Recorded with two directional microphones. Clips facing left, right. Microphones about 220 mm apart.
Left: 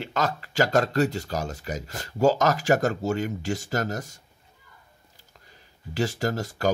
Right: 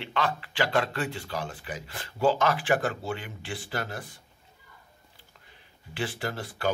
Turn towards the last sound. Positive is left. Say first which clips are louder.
# left 5 dB
turn(degrees=40)  # may be behind; listen again after turning